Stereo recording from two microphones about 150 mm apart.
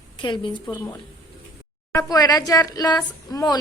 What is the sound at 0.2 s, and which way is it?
Speech, 30° left (ahead or behind).